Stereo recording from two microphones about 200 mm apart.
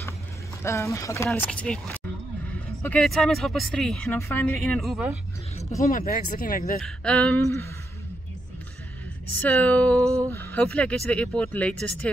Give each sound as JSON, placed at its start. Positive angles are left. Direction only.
{"t": 0.7, "sound": "speech", "side_deg": 15}
{"t": 5.8, "sound": "speech", "side_deg": 45}
{"t": 6.8, "sound": "speech", "side_deg": 5}
{"t": 9.4, "sound": "speech", "side_deg": 5}
{"t": 10.0, "sound": "speech", "side_deg": -15}
{"t": 10.3, "sound": "speech", "side_deg": 10}